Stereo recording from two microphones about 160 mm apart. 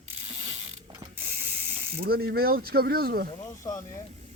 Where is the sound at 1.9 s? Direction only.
70° right (ahead or behind).